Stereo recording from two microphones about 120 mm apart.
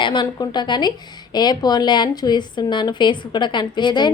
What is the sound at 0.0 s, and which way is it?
A woman's voice, 40° left (ahead or behind).